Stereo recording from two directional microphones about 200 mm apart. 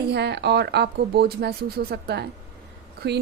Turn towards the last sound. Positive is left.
turn(degrees=-60)  # may be behind; listen again after turning